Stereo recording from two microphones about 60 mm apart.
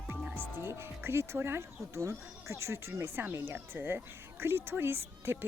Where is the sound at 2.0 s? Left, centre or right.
Right.